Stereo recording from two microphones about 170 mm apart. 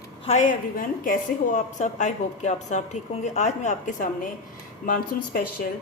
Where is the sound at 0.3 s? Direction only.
45° left (ahead or behind).